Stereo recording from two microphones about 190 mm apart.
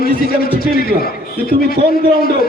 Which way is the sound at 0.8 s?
50° left (ahead or behind).